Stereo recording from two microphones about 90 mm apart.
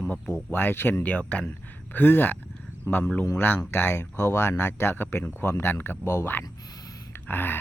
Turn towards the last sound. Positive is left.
turn(degrees=20)  # may be behind; listen again after turning